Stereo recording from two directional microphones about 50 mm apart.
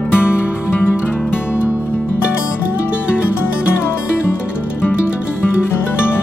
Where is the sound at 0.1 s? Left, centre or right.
Left.